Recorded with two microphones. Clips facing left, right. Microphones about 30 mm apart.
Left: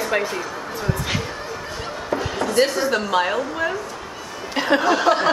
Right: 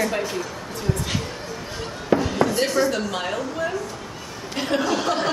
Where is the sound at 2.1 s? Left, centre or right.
Right.